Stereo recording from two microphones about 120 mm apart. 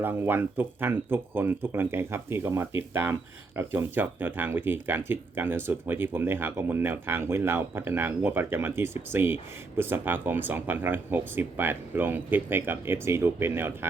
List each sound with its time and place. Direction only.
0.0 s speech: 15° right (ahead or behind)